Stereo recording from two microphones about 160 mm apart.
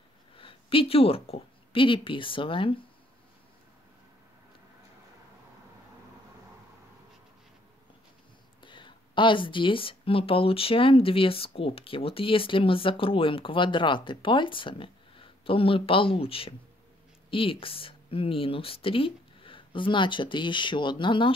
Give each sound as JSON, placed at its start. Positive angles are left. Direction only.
{"t": 0.4, "sound": "speech", "side_deg": 35}
{"t": 8.6, "sound": "speech", "side_deg": 30}